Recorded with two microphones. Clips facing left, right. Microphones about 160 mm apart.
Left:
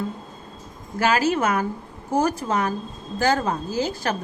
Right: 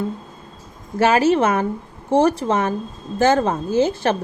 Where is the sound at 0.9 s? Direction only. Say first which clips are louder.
Right 5 dB; 25° right (ahead or behind).